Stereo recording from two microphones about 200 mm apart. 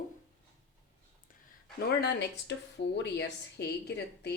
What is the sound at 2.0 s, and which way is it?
A woman's voice, 60° left (ahead or behind).